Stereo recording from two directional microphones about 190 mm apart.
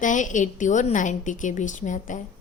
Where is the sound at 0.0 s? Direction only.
40° left (ahead or behind).